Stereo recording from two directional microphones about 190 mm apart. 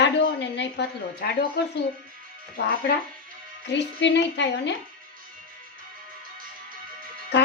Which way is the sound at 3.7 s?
65° left (ahead or behind).